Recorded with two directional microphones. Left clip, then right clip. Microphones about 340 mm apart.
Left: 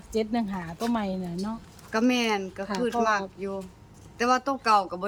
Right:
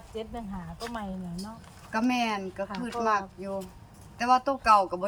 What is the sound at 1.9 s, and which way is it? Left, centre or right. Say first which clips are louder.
Speech: left 3 dB; centre.